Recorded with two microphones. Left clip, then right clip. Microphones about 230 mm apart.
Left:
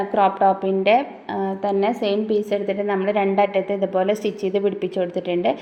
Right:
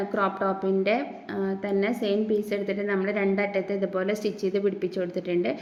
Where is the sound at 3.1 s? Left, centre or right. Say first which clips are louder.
Left 10 dB; right.